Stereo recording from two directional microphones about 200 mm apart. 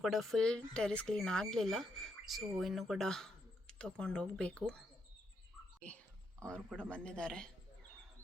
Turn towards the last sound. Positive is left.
turn(degrees=5)  # may be behind; listen again after turning